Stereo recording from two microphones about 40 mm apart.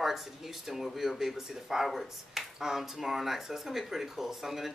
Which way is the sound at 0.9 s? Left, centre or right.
Centre.